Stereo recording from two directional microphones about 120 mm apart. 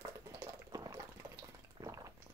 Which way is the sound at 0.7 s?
30° right (ahead or behind).